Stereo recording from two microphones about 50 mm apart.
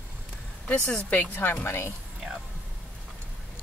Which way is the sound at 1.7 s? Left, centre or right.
Left.